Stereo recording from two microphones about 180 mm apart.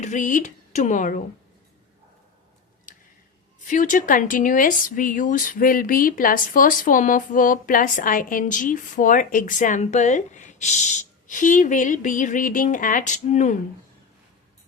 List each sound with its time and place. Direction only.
0.0 s speech: 45° left (ahead or behind)
2.9 s a sound: 45° left (ahead or behind)
3.7 s speech: 45° left (ahead or behind)